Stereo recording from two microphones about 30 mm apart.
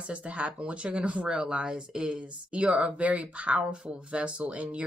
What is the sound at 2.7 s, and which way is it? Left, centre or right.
Speech, right.